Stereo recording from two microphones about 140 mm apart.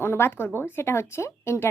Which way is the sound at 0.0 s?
15° left (ahead or behind).